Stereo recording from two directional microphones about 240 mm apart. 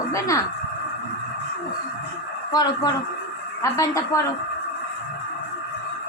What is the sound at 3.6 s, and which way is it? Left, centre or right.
Speech, centre.